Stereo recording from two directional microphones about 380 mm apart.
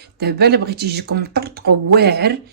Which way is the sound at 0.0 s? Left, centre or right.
Right.